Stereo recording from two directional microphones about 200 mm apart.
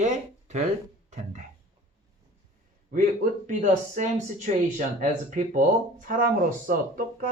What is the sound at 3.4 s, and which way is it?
Speech, 40° right (ahead or behind).